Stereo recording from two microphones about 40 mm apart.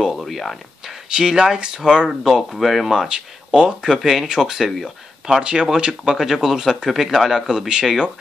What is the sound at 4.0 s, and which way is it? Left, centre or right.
Speech, centre.